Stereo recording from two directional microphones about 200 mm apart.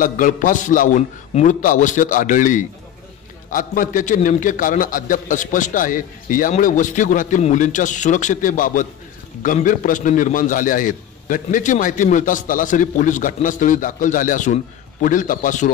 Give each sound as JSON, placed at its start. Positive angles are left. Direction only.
{"t": 0.0, "sound": "a man's voice", "side_deg": 40}